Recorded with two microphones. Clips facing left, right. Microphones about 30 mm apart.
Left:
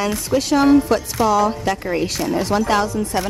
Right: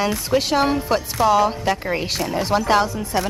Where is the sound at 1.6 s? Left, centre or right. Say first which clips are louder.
Left 1 dB; centre.